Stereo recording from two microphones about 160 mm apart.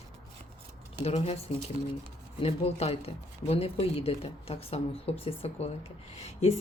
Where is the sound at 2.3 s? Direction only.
40° left (ahead or behind).